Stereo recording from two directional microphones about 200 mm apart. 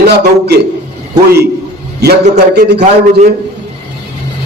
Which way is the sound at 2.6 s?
55° right (ahead or behind).